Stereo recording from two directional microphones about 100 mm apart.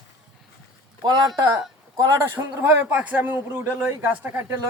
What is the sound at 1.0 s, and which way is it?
Speech, 40° right (ahead or behind).